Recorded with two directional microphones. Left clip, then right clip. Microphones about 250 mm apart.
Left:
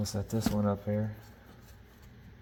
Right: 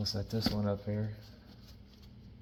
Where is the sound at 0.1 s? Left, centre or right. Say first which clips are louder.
Left 1 dB; left.